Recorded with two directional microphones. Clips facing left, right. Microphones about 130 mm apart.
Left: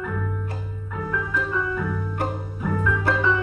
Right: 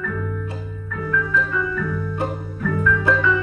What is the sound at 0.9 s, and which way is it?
Music, 20° left (ahead or behind).